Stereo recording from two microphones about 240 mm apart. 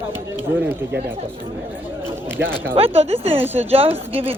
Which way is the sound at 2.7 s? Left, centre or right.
Right.